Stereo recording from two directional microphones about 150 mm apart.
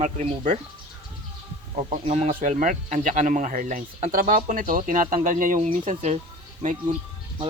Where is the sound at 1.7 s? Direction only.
45° right (ahead or behind).